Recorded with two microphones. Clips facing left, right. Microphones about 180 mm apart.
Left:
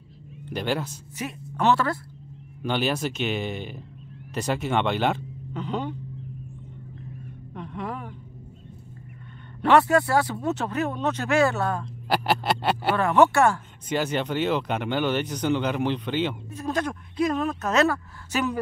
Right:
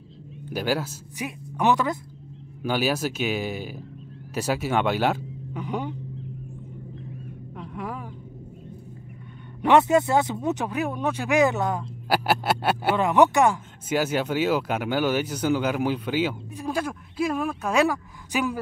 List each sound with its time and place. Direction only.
0.5 s speech: 5° right (ahead or behind)
7.5 s vehicle: 10° right (ahead or behind)
9.6 s speech: 20° right (ahead or behind)
11.8 s speech: 5° right (ahead or behind)
12.9 s speech: 15° right (ahead or behind)
13.8 s speech: 5° right (ahead or behind)